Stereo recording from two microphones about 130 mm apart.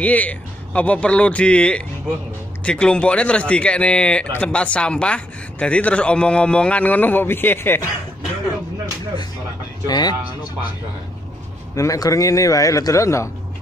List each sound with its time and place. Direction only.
0.0 s speech: 10° left (ahead or behind)
9.8 s speech: 30° left (ahead or behind)
11.7 s a man's voice: 25° left (ahead or behind)